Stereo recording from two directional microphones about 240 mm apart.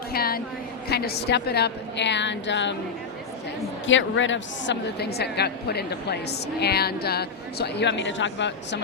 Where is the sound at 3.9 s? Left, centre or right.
Left.